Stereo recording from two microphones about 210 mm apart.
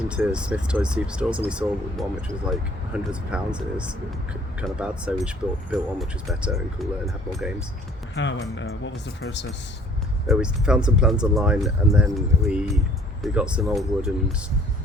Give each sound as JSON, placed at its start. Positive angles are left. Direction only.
{"t": 0.1, "sound": "speech", "side_deg": -5}
{"t": 8.1, "sound": "speech", "side_deg": 60}
{"t": 10.2, "sound": "speech", "side_deg": -5}